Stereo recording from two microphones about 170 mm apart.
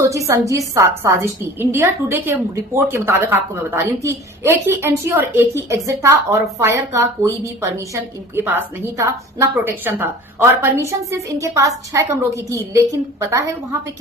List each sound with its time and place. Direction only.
0.0 s a woman's voice: 20° right (ahead or behind)